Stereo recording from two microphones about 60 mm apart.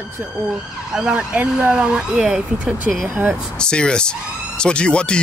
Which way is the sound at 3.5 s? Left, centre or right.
Centre.